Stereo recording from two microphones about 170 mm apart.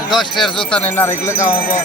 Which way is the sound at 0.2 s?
Centre (ahead or behind).